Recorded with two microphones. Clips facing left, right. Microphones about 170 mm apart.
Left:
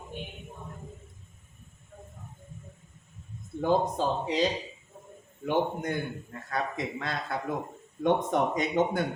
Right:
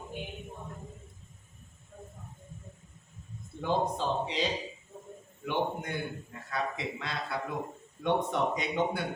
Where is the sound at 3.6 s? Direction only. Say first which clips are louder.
Left 4 dB; 45° left (ahead or behind).